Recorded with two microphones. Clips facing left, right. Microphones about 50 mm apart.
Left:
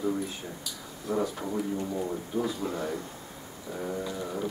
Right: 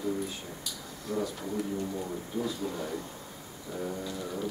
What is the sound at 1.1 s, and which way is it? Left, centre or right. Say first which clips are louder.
Speech: left 4 dB; left.